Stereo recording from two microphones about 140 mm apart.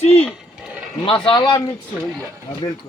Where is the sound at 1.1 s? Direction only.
35° left (ahead or behind).